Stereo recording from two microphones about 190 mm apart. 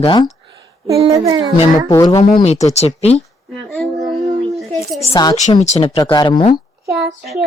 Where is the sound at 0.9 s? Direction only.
25° right (ahead or behind).